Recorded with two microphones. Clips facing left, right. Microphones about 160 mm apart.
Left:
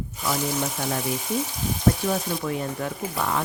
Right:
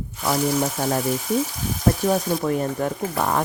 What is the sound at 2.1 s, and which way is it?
Speech, 45° right (ahead or behind).